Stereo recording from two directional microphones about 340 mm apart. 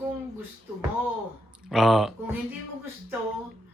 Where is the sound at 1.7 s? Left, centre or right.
Centre.